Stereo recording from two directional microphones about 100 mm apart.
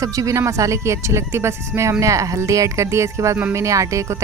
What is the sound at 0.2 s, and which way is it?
Speech, 30° right (ahead or behind).